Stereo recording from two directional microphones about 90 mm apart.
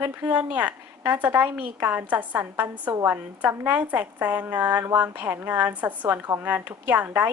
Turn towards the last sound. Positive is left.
turn(degrees=-20)  # may be behind; listen again after turning